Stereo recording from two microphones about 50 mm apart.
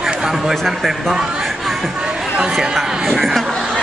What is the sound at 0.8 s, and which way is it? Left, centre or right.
Speech, centre.